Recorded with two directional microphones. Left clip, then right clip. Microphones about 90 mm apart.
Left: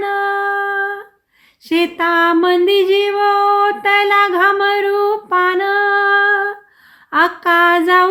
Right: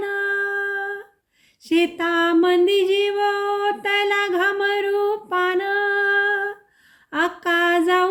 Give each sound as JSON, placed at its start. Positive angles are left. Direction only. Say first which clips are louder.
{"t": 0.0, "sound": "female singing", "louder": "left 6 dB", "side_deg": -20}
{"t": 1.6, "sound": "a sound", "louder": "left 5 dB", "side_deg": -20}
{"t": 7.4, "sound": "female singing", "louder": "left 5 dB", "side_deg": -25}